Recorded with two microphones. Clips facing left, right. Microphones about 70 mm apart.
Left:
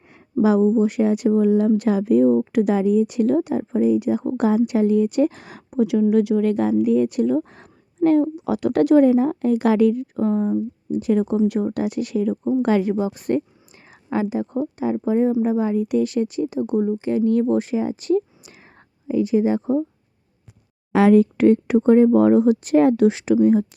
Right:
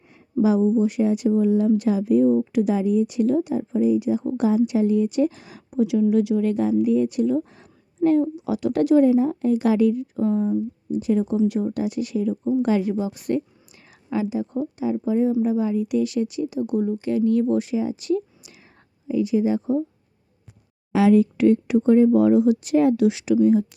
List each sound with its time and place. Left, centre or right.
0.4 s speech: left
20.9 s speech: left